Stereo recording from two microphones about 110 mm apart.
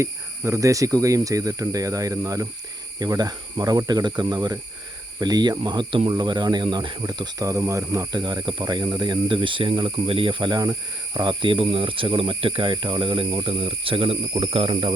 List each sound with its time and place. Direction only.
0.0 s speech: 25° right (ahead or behind)
8.2 s speech: 45° right (ahead or behind)